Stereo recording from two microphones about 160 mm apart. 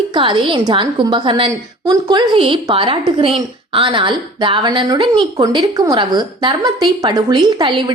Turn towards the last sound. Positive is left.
turn(degrees=-30)  # may be behind; listen again after turning